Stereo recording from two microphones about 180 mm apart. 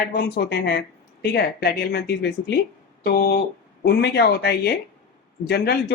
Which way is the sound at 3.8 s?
70° left (ahead or behind).